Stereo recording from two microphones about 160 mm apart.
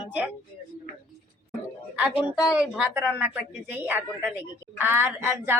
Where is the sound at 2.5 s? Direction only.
5° right (ahead or behind).